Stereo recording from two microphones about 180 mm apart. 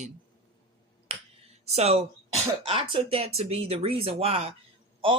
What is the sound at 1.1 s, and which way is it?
Finger snapping, 35° right (ahead or behind).